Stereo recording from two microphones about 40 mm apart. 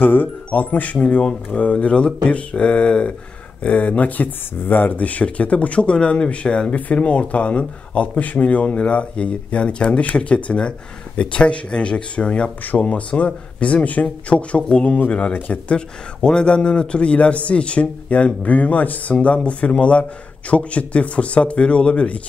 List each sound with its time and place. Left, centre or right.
0.0 s speech: left
0.5 s speech: left
1.1 s a man's voice: left
4.6 s a man's voice: left
14.3 s a man's voice: left
15.3 s speech: left
15.7 s a man's voice: left
19.1 s speech: left